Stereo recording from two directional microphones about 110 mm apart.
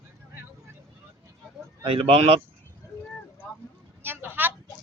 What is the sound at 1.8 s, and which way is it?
Speech, 55° right (ahead or behind).